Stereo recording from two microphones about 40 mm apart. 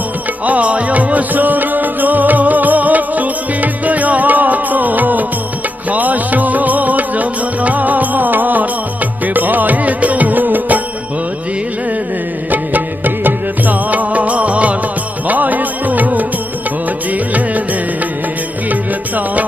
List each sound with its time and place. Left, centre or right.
0.5 s music: right
12.4 s music: right
18.7 s music: right